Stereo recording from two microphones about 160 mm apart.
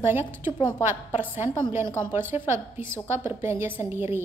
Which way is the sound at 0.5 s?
30° left (ahead or behind).